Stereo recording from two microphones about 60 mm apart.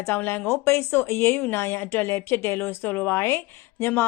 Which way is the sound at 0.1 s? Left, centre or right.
Left.